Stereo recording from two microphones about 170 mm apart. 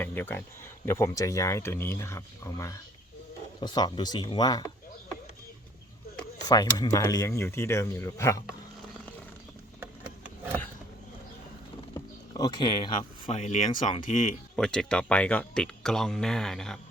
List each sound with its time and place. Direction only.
0.0 s speech: 10° left (ahead or behind)
6.5 s speech: 20° left (ahead or behind)
11.9 s speech: 20° left (ahead or behind)
13.3 s speech: 45° left (ahead or behind)
14.5 s speech: 5° left (ahead or behind)